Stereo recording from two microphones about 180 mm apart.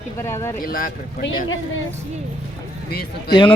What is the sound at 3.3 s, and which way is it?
Speech, 25° left (ahead or behind).